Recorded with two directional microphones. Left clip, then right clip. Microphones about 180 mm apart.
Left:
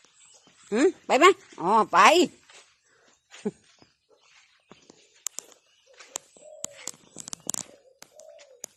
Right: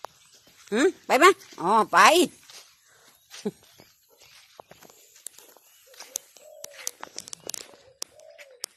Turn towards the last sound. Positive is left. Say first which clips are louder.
# right 5 dB
turn(degrees=-60)  # may be behind; listen again after turning